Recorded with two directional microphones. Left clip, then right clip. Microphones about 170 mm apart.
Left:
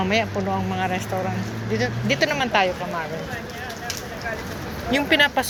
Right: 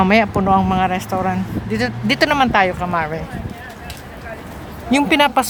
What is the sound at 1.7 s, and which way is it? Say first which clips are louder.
Speech: right 3 dB; 45° right (ahead or behind).